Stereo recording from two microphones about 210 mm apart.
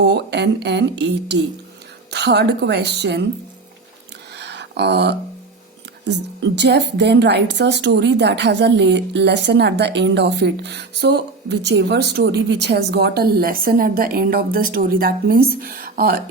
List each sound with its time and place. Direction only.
0.0 s a woman's voice: 55° right (ahead or behind)
4.4 s a sound: 55° right (ahead or behind)
6.1 s a woman's voice: 55° right (ahead or behind)